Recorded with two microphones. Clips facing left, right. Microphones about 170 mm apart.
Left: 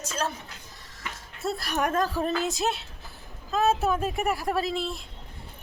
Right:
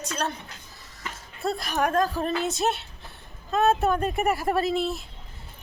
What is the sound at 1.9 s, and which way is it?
Speech, centre (ahead or behind).